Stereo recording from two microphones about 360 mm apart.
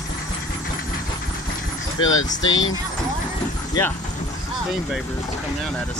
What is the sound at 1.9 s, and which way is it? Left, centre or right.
Speech, left.